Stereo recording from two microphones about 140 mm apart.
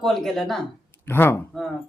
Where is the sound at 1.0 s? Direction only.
15° left (ahead or behind).